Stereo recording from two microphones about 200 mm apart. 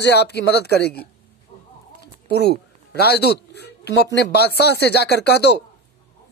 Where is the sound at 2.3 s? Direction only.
55° left (ahead or behind).